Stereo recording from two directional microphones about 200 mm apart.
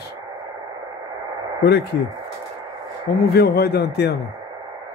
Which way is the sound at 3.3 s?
50° left (ahead or behind).